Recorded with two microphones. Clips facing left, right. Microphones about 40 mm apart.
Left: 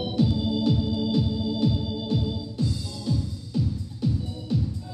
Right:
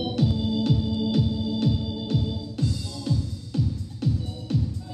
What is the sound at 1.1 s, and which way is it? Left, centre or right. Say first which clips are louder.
Organ: even; right.